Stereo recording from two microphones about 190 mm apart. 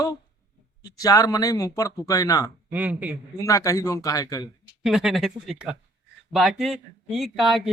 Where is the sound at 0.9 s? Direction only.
20° left (ahead or behind).